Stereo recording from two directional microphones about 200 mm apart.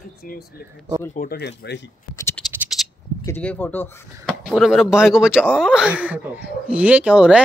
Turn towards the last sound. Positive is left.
turn(degrees=-5)  # may be behind; listen again after turning